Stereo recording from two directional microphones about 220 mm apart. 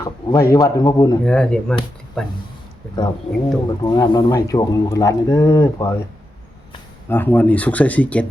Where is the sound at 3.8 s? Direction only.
20° left (ahead or behind).